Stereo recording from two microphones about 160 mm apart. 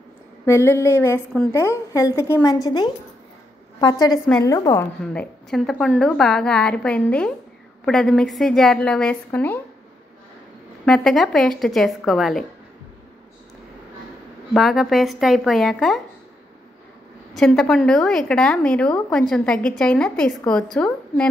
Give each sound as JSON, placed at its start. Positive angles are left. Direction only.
{"t": 0.5, "sound": "a woman's voice", "side_deg": 15}
{"t": 5.0, "sound": "a woman's voice", "side_deg": 5}
{"t": 10.9, "sound": "a woman's voice", "side_deg": 0}
{"t": 14.5, "sound": "a woman's voice", "side_deg": 0}
{"t": 17.4, "sound": "a woman's voice", "side_deg": 0}